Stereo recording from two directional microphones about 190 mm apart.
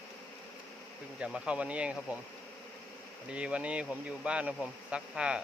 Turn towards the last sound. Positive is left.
turn(degrees=-5)  # may be behind; listen again after turning